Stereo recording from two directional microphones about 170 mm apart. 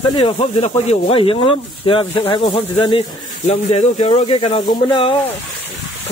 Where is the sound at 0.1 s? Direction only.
30° left (ahead or behind).